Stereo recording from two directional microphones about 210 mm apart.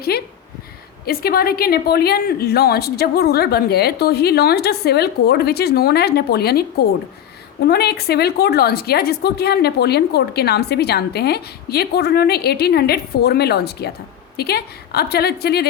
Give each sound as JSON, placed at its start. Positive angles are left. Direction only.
{"t": 0.1, "sound": "a woman's voice", "side_deg": 50}